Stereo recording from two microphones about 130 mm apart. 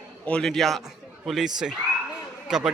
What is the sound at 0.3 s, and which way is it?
A man's voice, 5° left (ahead or behind).